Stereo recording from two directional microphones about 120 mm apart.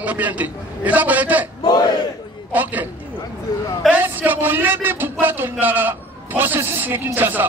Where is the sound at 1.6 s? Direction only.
35° left (ahead or behind).